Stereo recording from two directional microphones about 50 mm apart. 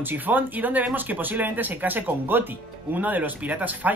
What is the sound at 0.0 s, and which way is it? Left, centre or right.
Speech, right.